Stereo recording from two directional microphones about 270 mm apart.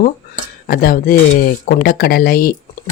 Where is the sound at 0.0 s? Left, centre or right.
Left.